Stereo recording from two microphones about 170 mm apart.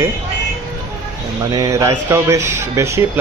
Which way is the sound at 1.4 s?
20° right (ahead or behind).